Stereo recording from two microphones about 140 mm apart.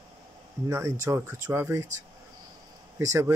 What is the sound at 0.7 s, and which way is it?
Speech, 20° right (ahead or behind).